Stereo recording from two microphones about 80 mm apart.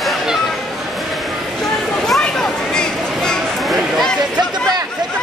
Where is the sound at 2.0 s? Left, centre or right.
Centre.